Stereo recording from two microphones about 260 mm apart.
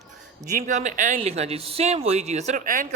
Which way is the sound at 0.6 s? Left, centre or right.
Right.